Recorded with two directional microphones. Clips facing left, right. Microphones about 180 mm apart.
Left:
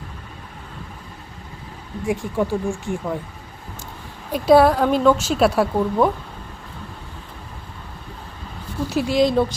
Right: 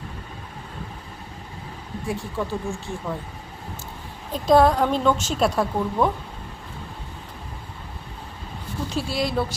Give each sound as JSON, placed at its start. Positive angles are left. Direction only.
{"t": 2.0, "sound": "a woman's voice", "side_deg": 15}
{"t": 4.3, "sound": "a woman's voice", "side_deg": 10}
{"t": 9.0, "sound": "a woman's voice", "side_deg": 15}